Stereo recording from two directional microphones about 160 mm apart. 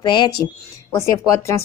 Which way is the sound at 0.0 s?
25° left (ahead or behind).